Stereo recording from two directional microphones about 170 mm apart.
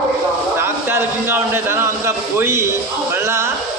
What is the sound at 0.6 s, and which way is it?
Speech, 10° right (ahead or behind).